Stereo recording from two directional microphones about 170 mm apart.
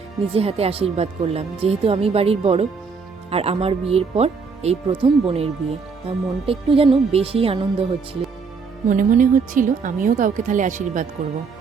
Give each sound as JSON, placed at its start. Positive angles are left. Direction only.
{"t": 0.3, "sound": "speech", "side_deg": -35}
{"t": 8.9, "sound": "a woman's voice", "side_deg": -50}